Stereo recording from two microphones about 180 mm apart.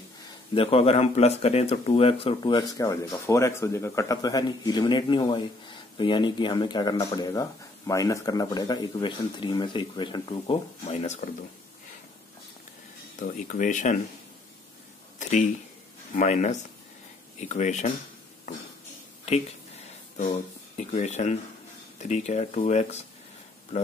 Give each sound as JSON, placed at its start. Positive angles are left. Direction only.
{"t": 0.6, "sound": "speech", "side_deg": 30}
{"t": 13.1, "sound": "speech", "side_deg": 45}
{"t": 15.1, "sound": "speech", "side_deg": 45}
{"t": 20.2, "sound": "speech", "side_deg": 40}